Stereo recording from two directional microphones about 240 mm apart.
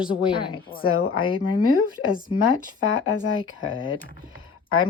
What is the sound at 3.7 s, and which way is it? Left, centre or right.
Speech, left.